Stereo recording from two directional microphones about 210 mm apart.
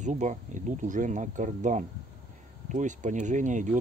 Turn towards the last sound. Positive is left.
turn(degrees=-35)  # may be behind; listen again after turning